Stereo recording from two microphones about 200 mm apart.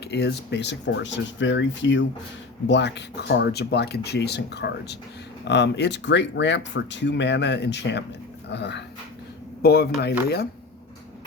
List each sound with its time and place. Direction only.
0.0 s speech: 55° left (ahead or behind)